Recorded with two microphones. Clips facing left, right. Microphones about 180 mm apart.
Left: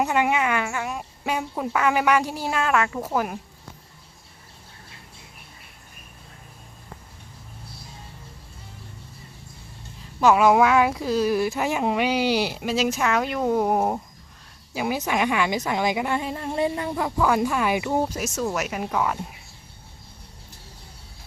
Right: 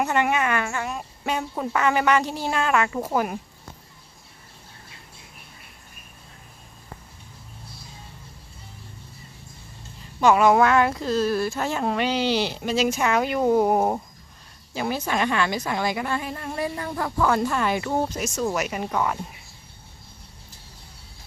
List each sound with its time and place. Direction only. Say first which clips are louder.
0.0 s speech: left 1 dB; 10° left (ahead or behind)
10.0 s speech: even; centre (ahead or behind)
14.7 s speech: left 1 dB; 10° left (ahead or behind)